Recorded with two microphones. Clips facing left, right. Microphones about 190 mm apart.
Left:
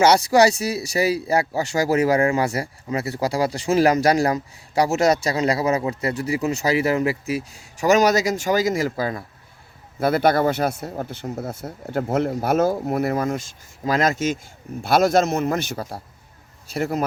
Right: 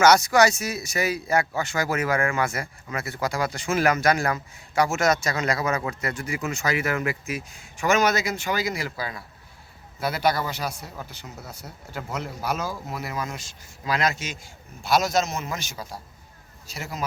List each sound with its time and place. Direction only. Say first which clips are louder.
0.0 s speech: left 3 dB; 30° left (ahead or behind); by 17.0 s 55° left (ahead or behind)